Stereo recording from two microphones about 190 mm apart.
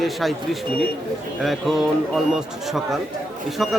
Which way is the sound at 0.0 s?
Centre (ahead or behind).